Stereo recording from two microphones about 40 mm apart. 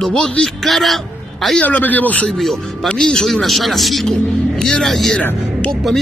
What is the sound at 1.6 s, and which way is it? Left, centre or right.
Speech, left.